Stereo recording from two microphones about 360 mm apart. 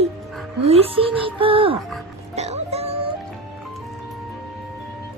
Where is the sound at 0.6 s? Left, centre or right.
Centre.